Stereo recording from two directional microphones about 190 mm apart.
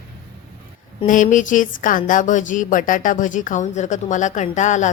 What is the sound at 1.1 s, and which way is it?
A woman's voice, 40° left (ahead or behind).